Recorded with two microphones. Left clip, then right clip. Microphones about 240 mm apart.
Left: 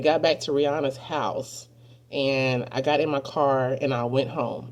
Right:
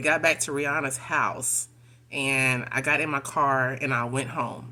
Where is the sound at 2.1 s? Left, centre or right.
Right.